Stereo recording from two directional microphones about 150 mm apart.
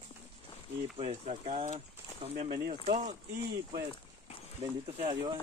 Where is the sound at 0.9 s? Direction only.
40° right (ahead or behind).